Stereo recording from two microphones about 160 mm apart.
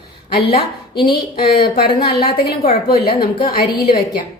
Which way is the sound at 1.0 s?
75° left (ahead or behind).